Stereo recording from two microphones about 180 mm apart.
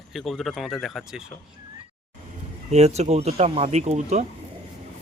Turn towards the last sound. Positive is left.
turn(degrees=-40)  # may be behind; listen again after turning